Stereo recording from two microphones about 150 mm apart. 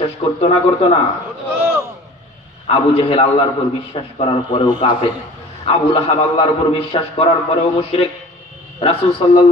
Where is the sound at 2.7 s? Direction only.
40° left (ahead or behind).